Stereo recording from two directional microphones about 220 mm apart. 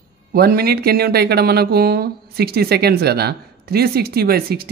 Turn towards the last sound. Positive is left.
turn(degrees=-45)  # may be behind; listen again after turning